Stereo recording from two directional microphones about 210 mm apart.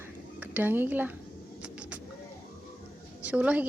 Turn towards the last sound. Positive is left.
turn(degrees=-5)  # may be behind; listen again after turning